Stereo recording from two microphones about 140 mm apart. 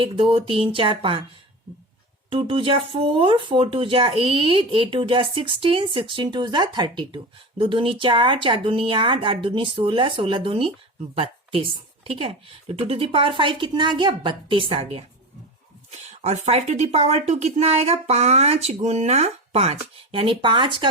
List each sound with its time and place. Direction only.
0.0 s speech: 40° right (ahead or behind)
2.3 s a woman's voice: 40° right (ahead or behind)